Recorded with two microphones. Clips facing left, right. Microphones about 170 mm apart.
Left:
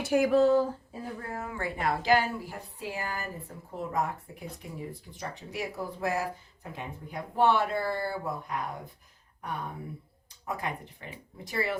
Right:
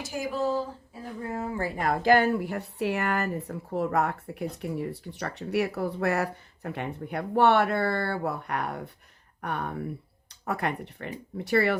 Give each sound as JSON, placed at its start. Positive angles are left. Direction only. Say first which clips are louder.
{"t": 0.0, "sound": "speech", "louder": "left 8 dB", "side_deg": 60}
{"t": 1.3, "sound": "speech", "louder": "right 6 dB", "side_deg": -30}